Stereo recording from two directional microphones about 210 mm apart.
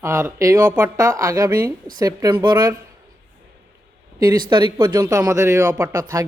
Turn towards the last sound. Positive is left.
turn(degrees=-10)  # may be behind; listen again after turning